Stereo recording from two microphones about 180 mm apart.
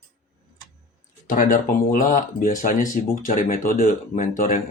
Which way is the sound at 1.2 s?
45° left (ahead or behind).